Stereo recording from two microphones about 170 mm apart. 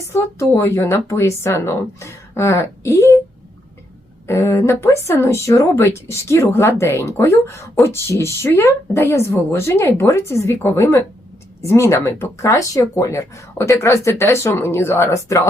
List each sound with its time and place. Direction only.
0.1 s a woman's voice: 15° left (ahead or behind)
4.3 s a woman's voice: 15° left (ahead or behind)